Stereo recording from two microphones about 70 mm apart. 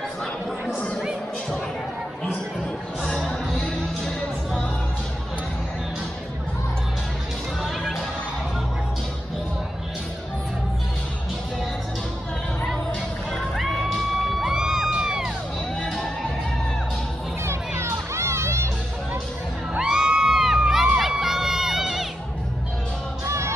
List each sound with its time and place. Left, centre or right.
0.2 s a sound: centre
0.7 s a sound: centre
3.0 s music: centre
7.6 s music: centre
13.3 s music: centre
15.8 s music: centre
17.5 s music: right
19.7 s crowd: centre
23.2 s music: right